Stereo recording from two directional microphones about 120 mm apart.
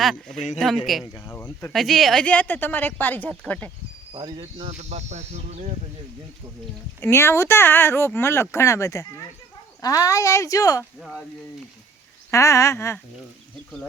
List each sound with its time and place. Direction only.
0.0 s speech: centre (ahead or behind)
0.3 s speech: 80° left
0.6 s speech: centre (ahead or behind)
1.1 s speech: 20° left (ahead or behind)
1.7 s speech: centre (ahead or behind)
2.2 s speech: 10° left (ahead or behind)
4.1 s speech: 45° right (ahead or behind); by 5.7 s 70° right (ahead or behind)
7.0 s speech: 20° left (ahead or behind)
12.3 s speech: 25° left (ahead or behind)